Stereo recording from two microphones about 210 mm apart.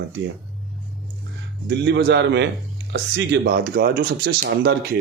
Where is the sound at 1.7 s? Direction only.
55° right (ahead or behind).